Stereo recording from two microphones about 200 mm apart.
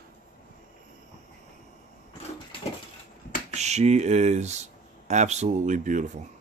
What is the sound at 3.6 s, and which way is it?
Speech, 35° right (ahead or behind).